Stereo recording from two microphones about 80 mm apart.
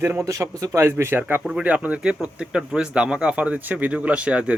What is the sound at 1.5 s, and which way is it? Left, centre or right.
Speech, centre.